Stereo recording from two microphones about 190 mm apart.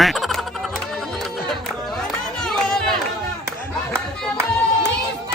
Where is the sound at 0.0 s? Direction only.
Centre (ahead or behind).